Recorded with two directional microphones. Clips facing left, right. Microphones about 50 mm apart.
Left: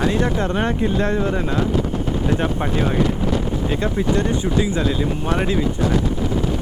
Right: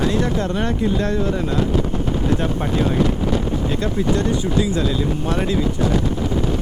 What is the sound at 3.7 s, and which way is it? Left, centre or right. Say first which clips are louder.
Speech: left 1 dB; centre.